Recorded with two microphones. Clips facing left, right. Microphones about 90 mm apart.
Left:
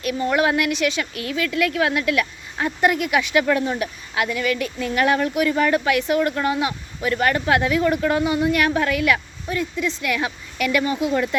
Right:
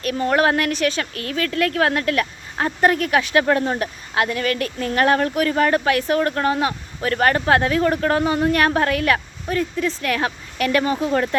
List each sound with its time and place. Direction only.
0.0 s speech: 40° right (ahead or behind)